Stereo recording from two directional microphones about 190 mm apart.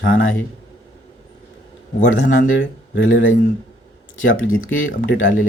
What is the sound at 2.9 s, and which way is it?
Speech, 80° left.